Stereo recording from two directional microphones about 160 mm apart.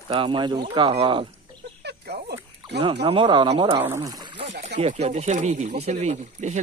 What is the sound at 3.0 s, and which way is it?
Speech, 30° right (ahead or behind).